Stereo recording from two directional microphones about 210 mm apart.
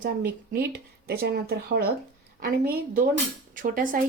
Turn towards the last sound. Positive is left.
turn(degrees=-40)  # may be behind; listen again after turning